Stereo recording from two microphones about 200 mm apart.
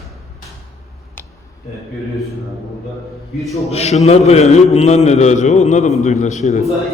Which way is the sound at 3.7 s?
30° left (ahead or behind).